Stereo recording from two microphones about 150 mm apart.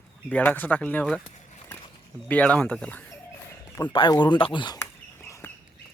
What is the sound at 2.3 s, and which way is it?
Speech, 10° left (ahead or behind).